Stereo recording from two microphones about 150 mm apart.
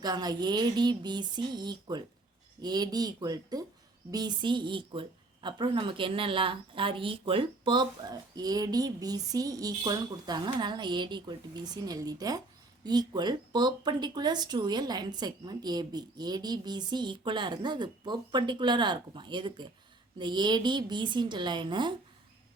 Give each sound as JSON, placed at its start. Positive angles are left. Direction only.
{"t": 0.0, "sound": "a woman's voice", "side_deg": -25}